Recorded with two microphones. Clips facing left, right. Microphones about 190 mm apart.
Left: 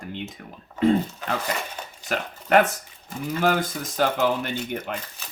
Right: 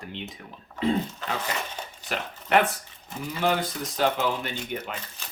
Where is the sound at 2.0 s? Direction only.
45° left (ahead or behind).